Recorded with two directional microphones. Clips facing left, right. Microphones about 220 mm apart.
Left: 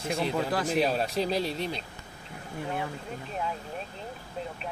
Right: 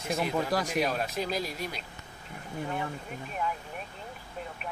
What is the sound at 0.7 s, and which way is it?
Speech, 30° left (ahead or behind).